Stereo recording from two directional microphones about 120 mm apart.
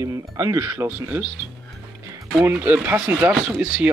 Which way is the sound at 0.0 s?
25° right (ahead or behind).